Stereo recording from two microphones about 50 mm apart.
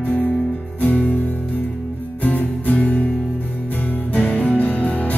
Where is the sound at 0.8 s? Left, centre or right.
Left.